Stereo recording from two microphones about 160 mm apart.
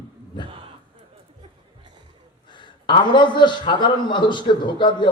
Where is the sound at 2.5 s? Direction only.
30° left (ahead or behind).